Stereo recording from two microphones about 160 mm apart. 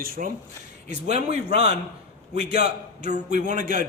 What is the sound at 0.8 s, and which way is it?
A man's voice, 45° right (ahead or behind).